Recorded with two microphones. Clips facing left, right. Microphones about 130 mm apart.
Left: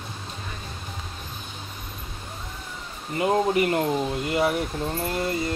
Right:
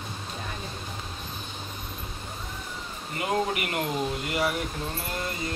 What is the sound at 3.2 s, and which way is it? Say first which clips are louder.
Speech: left 6 dB; 30° left (ahead or behind).